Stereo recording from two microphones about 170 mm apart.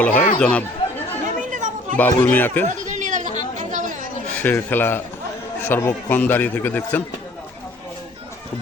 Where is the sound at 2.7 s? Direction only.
45° right (ahead or behind).